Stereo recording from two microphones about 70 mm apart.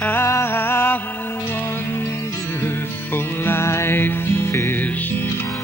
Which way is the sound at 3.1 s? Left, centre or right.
Left.